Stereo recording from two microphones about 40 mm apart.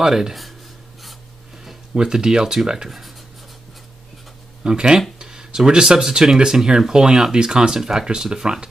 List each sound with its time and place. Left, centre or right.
0.0 s speech: centre
2.0 s speech: centre
4.6 s speech: centre